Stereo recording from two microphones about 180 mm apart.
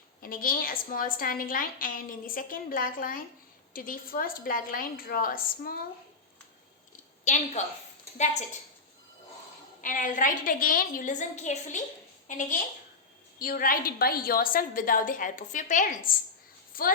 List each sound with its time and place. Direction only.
0.2 s a woman's voice: 50° left (ahead or behind)
7.3 s a woman's voice: 40° left (ahead or behind)
9.8 s a woman's voice: 45° left (ahead or behind)